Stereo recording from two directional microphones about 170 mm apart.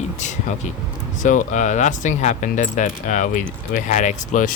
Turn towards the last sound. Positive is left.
turn(degrees=45)  # may be behind; listen again after turning